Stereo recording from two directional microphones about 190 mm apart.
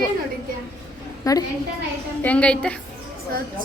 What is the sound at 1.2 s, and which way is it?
Speech, 15° left (ahead or behind).